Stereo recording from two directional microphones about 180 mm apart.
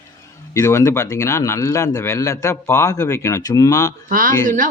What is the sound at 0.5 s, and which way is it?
Speech, 15° left (ahead or behind).